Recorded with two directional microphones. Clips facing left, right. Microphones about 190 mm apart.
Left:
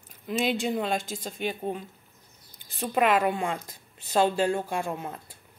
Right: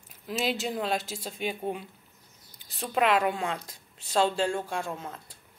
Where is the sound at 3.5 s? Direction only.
55° left (ahead or behind).